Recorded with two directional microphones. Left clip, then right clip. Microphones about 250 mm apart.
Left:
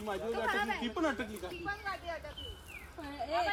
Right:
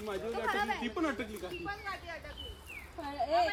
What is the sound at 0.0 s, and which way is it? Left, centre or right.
Speech, centre.